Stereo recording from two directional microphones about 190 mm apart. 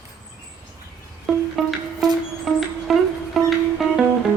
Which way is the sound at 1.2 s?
Centre (ahead or behind).